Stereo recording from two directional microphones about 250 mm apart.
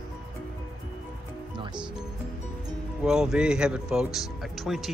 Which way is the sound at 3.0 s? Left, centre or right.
Centre.